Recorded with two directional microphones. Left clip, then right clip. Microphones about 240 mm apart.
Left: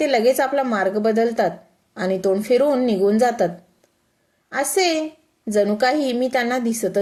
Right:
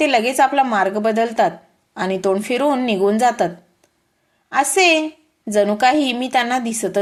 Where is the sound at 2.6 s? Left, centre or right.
Right.